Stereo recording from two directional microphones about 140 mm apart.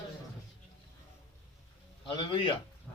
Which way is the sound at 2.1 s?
35° left (ahead or behind).